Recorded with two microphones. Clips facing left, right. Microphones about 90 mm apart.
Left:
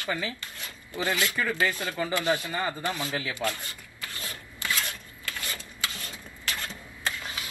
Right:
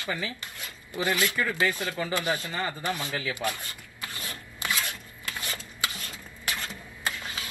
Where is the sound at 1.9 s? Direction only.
25° left (ahead or behind).